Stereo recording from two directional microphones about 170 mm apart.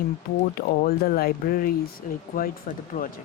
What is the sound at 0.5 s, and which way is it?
Speech, 60° left (ahead or behind).